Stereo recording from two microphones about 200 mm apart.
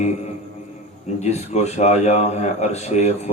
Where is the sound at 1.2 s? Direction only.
35° left (ahead or behind).